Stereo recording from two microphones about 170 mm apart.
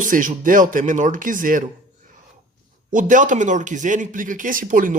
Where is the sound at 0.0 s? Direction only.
50° right (ahead or behind).